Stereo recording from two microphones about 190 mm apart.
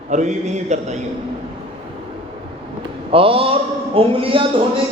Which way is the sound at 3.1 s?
30° right (ahead or behind).